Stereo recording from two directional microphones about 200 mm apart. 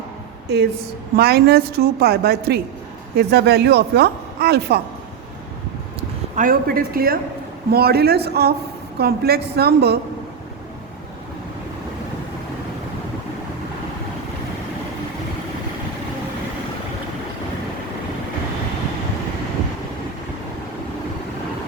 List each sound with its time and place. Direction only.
0.4 s a woman's voice: 55° right (ahead or behind)
6.0 s a woman's voice: 40° right (ahead or behind)